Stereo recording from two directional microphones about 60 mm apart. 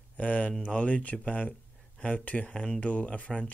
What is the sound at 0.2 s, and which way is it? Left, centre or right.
Speech, left.